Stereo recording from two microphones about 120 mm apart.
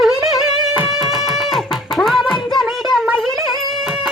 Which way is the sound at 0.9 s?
Centre (ahead or behind).